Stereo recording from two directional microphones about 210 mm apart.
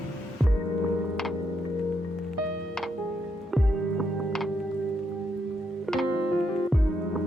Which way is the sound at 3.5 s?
Centre (ahead or behind).